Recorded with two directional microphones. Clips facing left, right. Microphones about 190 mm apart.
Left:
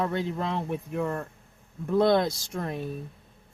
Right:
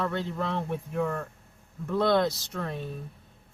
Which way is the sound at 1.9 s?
15° left (ahead or behind).